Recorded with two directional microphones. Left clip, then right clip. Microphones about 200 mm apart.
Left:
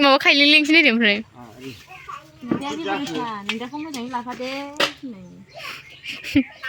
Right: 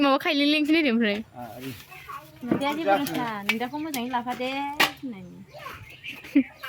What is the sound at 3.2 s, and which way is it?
Speech, centre (ahead or behind).